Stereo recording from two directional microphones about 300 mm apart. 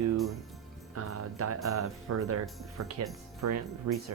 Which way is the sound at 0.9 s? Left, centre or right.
Right.